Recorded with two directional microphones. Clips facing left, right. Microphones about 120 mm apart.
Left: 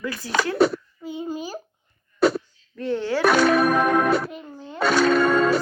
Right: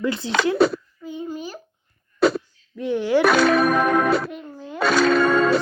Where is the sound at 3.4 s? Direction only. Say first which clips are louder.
Right 1 dB; 90° right.